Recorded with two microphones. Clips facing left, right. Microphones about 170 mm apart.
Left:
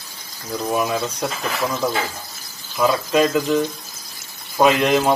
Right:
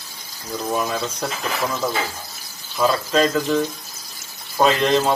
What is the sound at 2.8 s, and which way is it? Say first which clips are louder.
A man's voice: left 1 dB; 10° left (ahead or behind).